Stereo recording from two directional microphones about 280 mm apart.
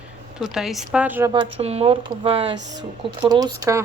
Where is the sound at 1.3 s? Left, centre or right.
Centre.